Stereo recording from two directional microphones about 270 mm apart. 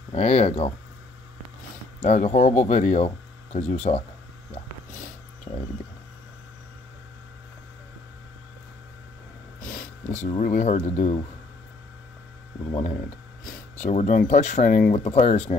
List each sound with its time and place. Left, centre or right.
0.1 s speech: left
2.0 s speech: left
9.6 s a sound: left
10.2 s speech: left
12.7 s a sound: left
13.8 s speech: left